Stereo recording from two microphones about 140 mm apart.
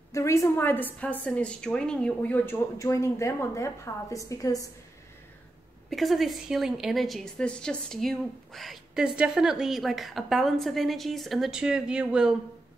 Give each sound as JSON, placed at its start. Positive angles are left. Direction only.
{"t": 0.1, "sound": "a woman's voice", "side_deg": 20}
{"t": 5.9, "sound": "a woman's voice", "side_deg": 0}